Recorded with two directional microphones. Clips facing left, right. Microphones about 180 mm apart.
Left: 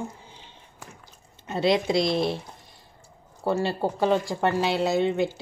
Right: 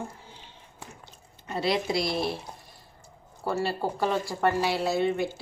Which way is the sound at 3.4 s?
20° left (ahead or behind).